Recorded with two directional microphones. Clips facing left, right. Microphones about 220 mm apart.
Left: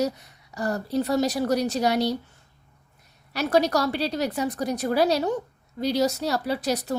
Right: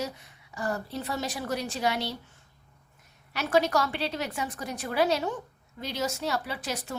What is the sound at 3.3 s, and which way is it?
A woman's voice, 40° left (ahead or behind).